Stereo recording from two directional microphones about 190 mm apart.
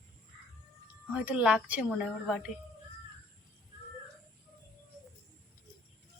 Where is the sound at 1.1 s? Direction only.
5° right (ahead or behind).